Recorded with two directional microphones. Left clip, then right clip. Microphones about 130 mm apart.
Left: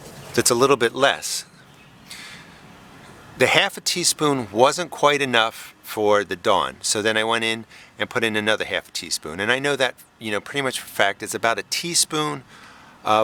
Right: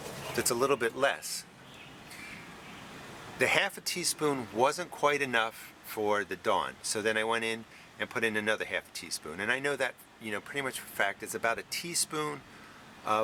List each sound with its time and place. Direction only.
0.3 s speech: 45° left (ahead or behind)
3.3 s speech: 45° left (ahead or behind)